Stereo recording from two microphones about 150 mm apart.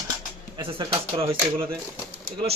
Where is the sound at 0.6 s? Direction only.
35° right (ahead or behind).